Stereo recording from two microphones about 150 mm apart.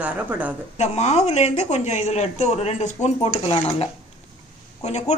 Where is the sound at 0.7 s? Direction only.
45° left (ahead or behind).